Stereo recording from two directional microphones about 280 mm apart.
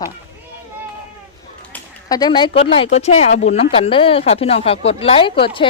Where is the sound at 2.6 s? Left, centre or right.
Centre.